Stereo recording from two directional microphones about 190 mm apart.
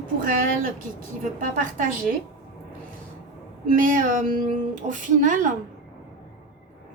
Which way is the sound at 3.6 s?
45° right (ahead or behind).